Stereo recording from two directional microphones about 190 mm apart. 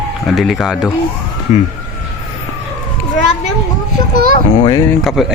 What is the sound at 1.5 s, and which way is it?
Speech, 40° left (ahead or behind).